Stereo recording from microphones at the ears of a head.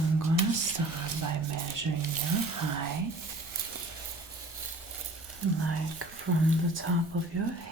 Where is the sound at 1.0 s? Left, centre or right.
Right.